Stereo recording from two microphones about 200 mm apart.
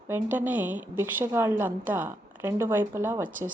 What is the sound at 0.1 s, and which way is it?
A woman's voice, 10° right (ahead or behind).